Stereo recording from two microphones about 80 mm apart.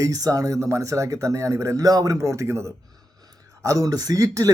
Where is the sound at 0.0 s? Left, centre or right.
Right.